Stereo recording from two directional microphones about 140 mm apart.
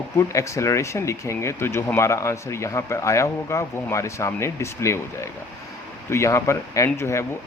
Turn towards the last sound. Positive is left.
turn(degrees=20)  # may be behind; listen again after turning